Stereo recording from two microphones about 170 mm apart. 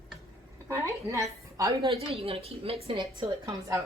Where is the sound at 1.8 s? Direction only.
30° right (ahead or behind).